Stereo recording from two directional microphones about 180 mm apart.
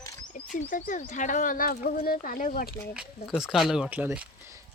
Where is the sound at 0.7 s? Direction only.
45° left (ahead or behind).